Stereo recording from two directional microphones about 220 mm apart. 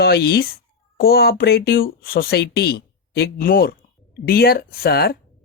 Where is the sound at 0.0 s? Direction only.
45° left (ahead or behind).